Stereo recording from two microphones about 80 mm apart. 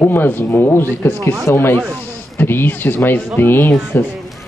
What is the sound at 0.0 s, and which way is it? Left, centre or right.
Speech, left.